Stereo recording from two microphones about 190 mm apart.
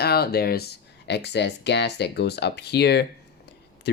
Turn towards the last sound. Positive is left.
turn(degrees=65)  # may be behind; listen again after turning